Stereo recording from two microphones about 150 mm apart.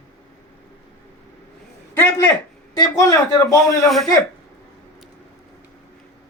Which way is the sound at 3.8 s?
Centre (ahead or behind).